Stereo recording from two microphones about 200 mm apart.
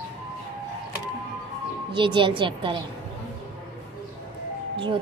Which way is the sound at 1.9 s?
25° right (ahead or behind).